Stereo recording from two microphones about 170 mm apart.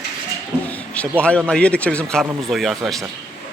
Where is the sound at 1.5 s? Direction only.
5° left (ahead or behind).